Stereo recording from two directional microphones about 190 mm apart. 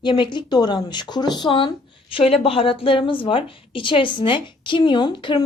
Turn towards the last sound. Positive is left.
turn(degrees=25)  # may be behind; listen again after turning